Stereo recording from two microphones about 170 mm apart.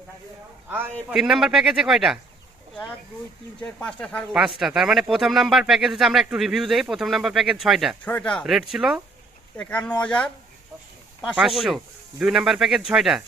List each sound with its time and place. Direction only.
1.1 s speech: 5° right (ahead or behind)
3.6 s speech: 5° left (ahead or behind)
4.3 s speech: 5° right (ahead or behind)
9.6 s speech: 5° left (ahead or behind)